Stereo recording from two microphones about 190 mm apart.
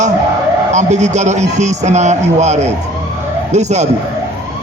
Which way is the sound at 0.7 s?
40° right (ahead or behind).